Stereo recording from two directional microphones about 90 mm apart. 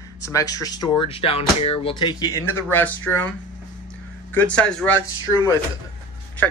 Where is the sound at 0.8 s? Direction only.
80° left.